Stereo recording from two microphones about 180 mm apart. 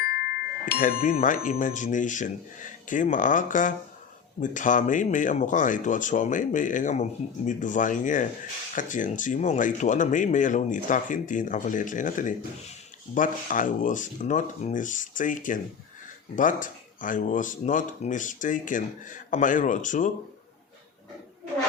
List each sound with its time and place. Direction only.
0.0 s speech: 60° left (ahead or behind)